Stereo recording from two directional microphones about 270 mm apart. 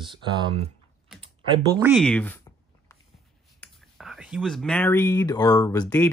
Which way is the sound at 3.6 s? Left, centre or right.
Centre.